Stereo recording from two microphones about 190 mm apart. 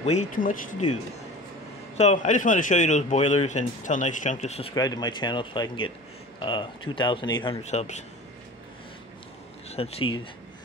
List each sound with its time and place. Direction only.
0.0 s speech: 40° left (ahead or behind)
2.0 s speech: 40° left (ahead or behind)
4.7 s speech: 20° left (ahead or behind)
7.6 s speech: 35° left (ahead or behind)
9.7 s speech: 30° left (ahead or behind)